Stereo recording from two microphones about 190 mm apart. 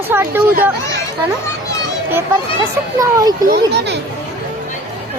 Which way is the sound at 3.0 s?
20° right (ahead or behind).